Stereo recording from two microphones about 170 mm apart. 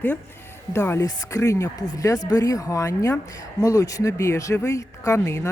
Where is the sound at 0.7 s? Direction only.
15° left (ahead or behind).